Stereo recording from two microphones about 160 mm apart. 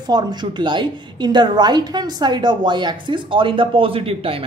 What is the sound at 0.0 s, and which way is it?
A woman's voice, 25° right (ahead or behind).